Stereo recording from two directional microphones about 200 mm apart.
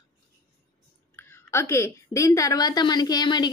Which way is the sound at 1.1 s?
10° left (ahead or behind).